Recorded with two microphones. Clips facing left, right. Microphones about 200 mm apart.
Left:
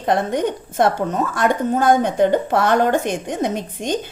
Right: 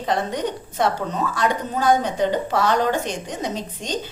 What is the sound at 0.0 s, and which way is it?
A woman's voice, 55° left (ahead or behind).